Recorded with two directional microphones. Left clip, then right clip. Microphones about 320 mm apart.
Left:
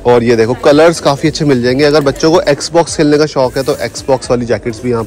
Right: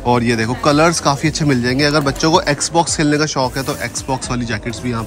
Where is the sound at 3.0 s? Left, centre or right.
Centre.